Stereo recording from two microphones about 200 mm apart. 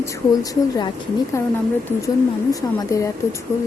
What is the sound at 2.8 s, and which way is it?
Speech, 15° left (ahead or behind).